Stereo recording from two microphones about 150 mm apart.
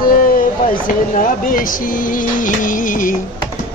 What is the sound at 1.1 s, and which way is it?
Music, 65° left (ahead or behind).